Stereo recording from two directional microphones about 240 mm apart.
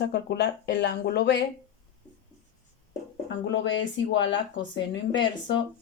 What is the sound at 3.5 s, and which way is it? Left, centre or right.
Speech, left.